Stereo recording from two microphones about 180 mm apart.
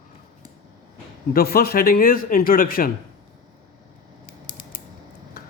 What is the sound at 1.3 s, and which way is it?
Speech, 60° left (ahead or behind).